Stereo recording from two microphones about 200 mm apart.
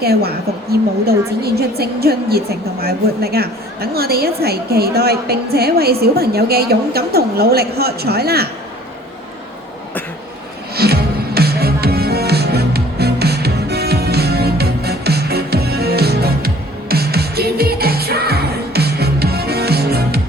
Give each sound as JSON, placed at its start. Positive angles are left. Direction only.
{"t": 0.0, "sound": "a woman's voice", "side_deg": -50}
{"t": 10.8, "sound": "music", "side_deg": -50}